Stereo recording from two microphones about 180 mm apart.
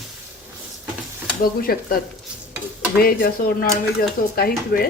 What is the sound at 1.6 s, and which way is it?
Speech, 55° left (ahead or behind).